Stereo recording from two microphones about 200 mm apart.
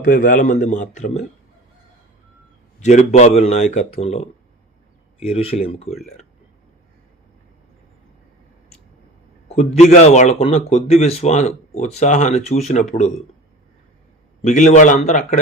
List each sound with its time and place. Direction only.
0.0 s a man's voice: 45° left (ahead or behind)
2.8 s a man's voice: 35° left (ahead or behind)
9.5 s a man's voice: 35° left (ahead or behind)
14.4 s a man's voice: 35° left (ahead or behind)